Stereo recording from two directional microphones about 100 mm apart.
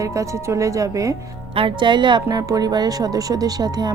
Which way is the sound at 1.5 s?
55° right (ahead or behind).